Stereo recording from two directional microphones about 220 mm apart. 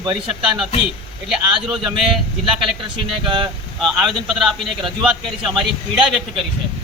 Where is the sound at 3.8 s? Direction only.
Centre (ahead or behind).